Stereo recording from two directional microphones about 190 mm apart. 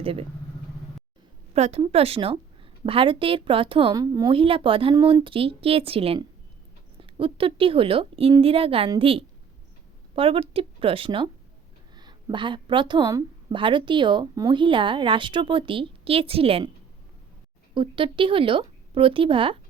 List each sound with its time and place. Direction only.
0.0 s speech: 30° right (ahead or behind)
1.5 s a woman's voice: 35° right (ahead or behind)
17.7 s a woman's voice: 25° right (ahead or behind)